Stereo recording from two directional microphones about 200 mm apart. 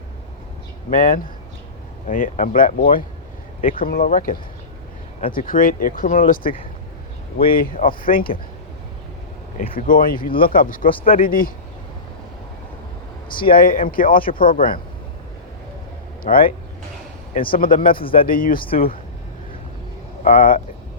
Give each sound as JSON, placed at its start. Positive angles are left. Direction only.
{"t": 0.9, "sound": "speech", "side_deg": 45}
{"t": 7.5, "sound": "speech", "side_deg": 45}
{"t": 9.7, "sound": "speech", "side_deg": 45}
{"t": 13.5, "sound": "speech", "side_deg": 45}
{"t": 16.2, "sound": "speech", "side_deg": 45}
{"t": 20.2, "sound": "speech", "side_deg": 40}